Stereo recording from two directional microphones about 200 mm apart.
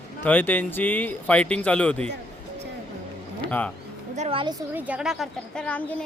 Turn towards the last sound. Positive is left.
turn(degrees=5)  # may be behind; listen again after turning